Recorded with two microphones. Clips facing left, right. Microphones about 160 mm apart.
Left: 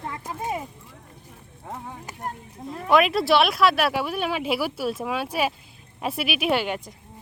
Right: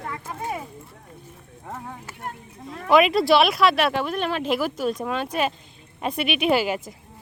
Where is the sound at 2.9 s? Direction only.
Centre (ahead or behind).